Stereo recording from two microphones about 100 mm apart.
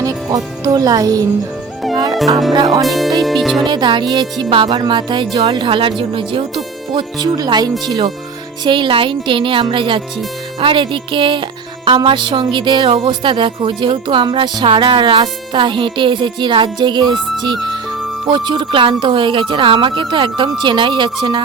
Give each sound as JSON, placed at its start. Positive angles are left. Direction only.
{"t": 0.0, "sound": "speech", "side_deg": -35}
{"t": 2.8, "sound": "speech", "side_deg": 0}
{"t": 3.7, "sound": "a woman's voice", "side_deg": -50}
{"t": 6.9, "sound": "a woman's voice", "side_deg": -45}
{"t": 8.6, "sound": "a woman's voice", "side_deg": -55}